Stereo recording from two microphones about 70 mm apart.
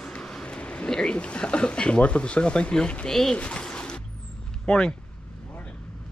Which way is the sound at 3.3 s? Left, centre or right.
Centre.